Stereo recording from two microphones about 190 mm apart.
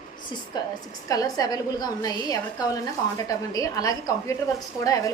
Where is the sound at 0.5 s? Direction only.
20° left (ahead or behind).